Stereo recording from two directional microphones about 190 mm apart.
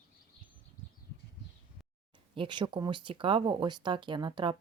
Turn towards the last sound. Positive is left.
turn(degrees=-25)  # may be behind; listen again after turning